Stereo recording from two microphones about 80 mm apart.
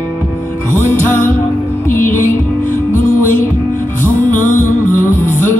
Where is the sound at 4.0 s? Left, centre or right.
Left.